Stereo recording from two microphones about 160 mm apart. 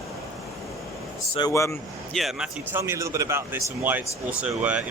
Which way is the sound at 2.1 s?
Centre (ahead or behind).